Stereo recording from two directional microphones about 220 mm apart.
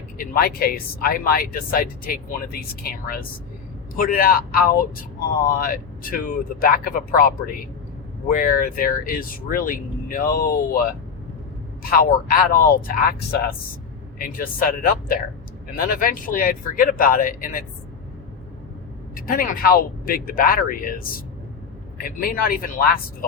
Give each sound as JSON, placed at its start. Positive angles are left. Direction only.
{"t": 0.2, "sound": "speech", "side_deg": 45}
{"t": 8.4, "sound": "speech", "side_deg": 40}
{"t": 19.1, "sound": "speech", "side_deg": 40}